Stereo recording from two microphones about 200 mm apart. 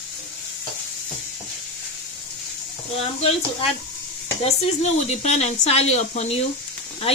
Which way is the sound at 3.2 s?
30° left (ahead or behind).